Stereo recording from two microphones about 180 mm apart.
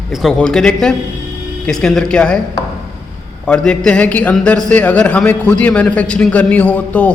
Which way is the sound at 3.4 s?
5° left (ahead or behind).